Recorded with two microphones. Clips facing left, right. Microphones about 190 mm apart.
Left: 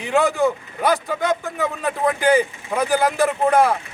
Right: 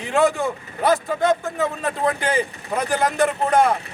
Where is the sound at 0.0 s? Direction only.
Centre (ahead or behind).